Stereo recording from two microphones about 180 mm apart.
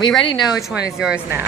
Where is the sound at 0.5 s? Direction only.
5° right (ahead or behind).